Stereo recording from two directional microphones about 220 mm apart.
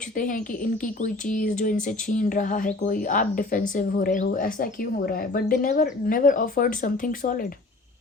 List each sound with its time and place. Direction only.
0.2 s speech: 40° left (ahead or behind)